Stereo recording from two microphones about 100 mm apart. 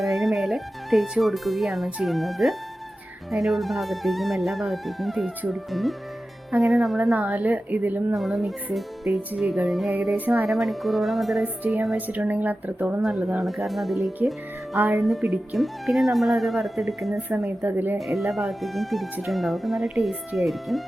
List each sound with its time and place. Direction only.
0.0 s speech: centre (ahead or behind); by 8.0 s 15° right (ahead or behind)
8.1 s speech: centre (ahead or behind)
10.2 s speech: 15° right (ahead or behind)
10.4 s speech: centre (ahead or behind)
11.9 s speech: 15° right (ahead or behind)
13.0 s speech: 5° right (ahead or behind)
17.2 s a woman's voice: 15° right (ahead or behind)
18.0 s speech: centre (ahead or behind)